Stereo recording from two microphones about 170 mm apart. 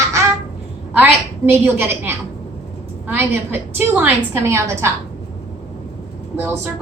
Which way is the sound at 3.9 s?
15° right (ahead or behind).